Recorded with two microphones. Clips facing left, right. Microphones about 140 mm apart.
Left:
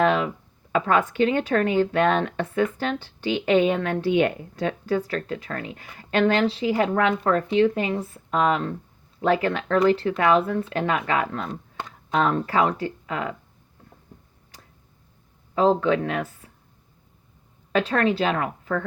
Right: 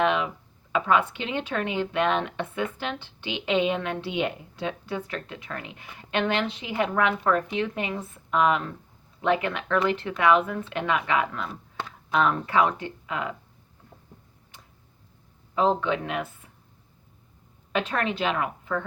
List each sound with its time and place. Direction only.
0.0 s a sound: 40° left (ahead or behind)
0.7 s a woman's voice: 45° left (ahead or behind)
15.6 s a woman's voice: 40° left (ahead or behind)
17.7 s a woman's voice: 35° left (ahead or behind)